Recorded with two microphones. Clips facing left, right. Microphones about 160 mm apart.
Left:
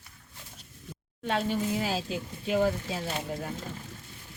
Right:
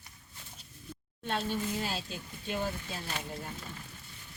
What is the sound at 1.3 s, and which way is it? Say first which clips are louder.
Speech: left 5 dB; 90° left.